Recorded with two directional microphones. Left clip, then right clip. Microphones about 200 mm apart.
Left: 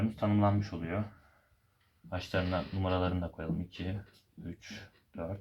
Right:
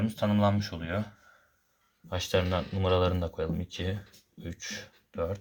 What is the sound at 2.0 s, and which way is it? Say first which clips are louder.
Speech: right 6 dB; 40° right (ahead or behind).